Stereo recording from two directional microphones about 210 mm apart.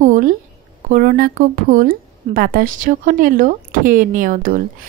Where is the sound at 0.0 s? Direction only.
40° right (ahead or behind).